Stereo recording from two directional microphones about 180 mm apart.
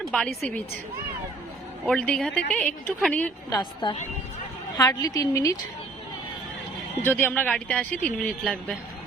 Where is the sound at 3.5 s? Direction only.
25° left (ahead or behind).